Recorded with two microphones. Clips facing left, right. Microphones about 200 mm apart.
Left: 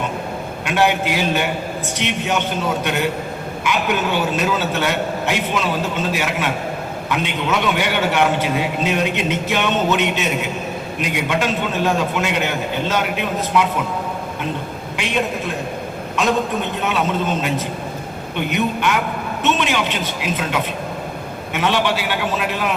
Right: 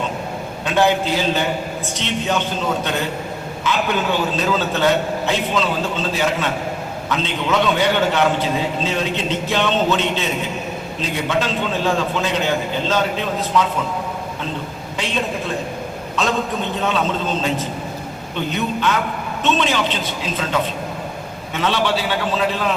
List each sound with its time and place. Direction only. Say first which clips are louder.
0.6 s a man's voice: right 1 dB; 15° left (ahead or behind)
16.8 s a man's voice: even; 10° left (ahead or behind)